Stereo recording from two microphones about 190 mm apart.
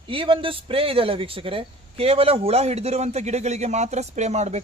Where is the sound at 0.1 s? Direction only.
25° right (ahead or behind).